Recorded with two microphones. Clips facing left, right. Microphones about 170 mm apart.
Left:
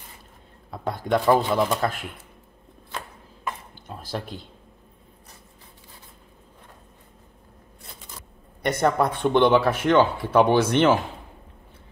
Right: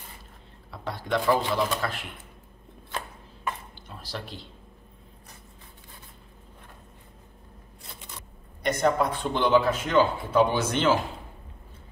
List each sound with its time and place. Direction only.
0.7 s speech: 50° left (ahead or behind)
4.0 s speech: 50° left (ahead or behind)
8.6 s speech: 65° left (ahead or behind)